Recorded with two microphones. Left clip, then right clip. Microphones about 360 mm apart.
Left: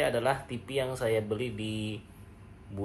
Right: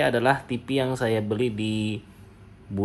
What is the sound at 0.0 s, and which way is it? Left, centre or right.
Speech, right.